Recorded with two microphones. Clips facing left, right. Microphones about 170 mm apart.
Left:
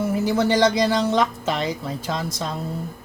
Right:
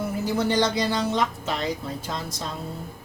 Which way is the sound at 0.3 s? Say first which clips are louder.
Left 4 dB; 90° left.